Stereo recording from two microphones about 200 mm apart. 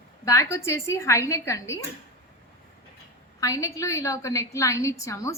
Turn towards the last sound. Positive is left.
turn(degrees=15)  # may be behind; listen again after turning